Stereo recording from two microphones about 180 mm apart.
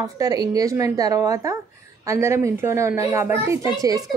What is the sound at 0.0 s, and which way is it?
A woman's voice, 20° right (ahead or behind).